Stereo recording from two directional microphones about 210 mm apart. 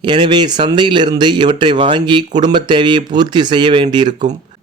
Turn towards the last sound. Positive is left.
turn(degrees=-20)  # may be behind; listen again after turning